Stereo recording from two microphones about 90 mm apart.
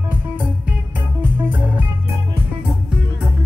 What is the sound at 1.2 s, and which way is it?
Music, 20° right (ahead or behind).